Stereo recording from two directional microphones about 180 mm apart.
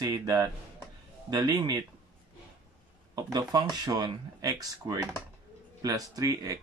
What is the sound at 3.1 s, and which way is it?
Speech, 20° right (ahead or behind).